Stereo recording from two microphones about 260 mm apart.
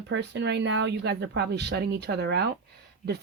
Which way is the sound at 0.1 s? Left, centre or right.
Right.